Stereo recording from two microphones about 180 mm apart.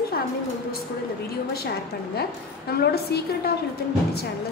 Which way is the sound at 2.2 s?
60° left (ahead or behind).